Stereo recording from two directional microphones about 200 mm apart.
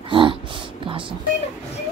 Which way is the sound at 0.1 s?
25° right (ahead or behind).